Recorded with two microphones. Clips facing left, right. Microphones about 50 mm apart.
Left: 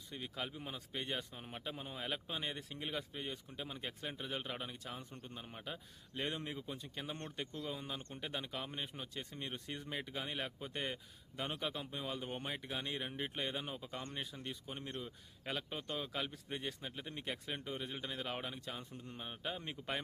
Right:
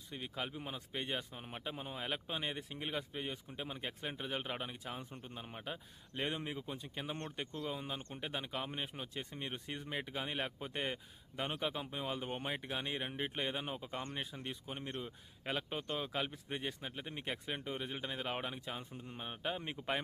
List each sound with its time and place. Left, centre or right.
0.1 s speech: centre